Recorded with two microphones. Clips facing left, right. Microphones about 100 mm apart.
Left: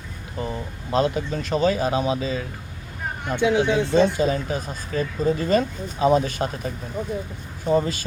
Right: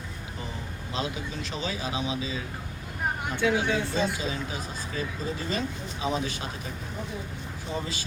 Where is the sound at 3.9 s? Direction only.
50° left (ahead or behind).